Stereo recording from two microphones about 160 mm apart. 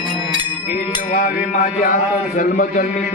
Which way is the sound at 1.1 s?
55° left (ahead or behind).